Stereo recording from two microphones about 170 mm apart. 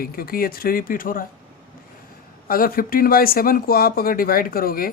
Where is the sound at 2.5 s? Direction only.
60° left (ahead or behind).